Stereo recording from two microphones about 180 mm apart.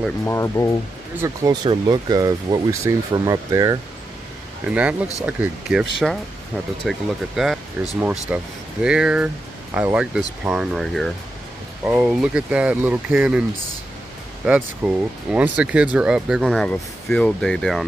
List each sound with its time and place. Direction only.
0.2 s speech: 15° left (ahead or behind)
1.2 s speech: 20° right (ahead or behind)
4.6 s speech: 10° right (ahead or behind)
14.4 s speech: 5° right (ahead or behind)